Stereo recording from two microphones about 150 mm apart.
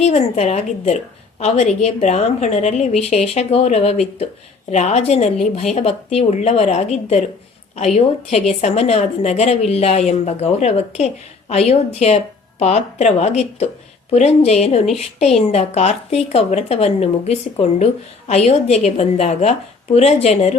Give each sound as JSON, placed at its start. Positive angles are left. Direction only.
{"t": 0.0, "sound": "speech", "side_deg": 50}